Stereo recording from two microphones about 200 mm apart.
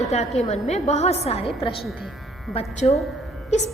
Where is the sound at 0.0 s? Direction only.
35° left (ahead or behind).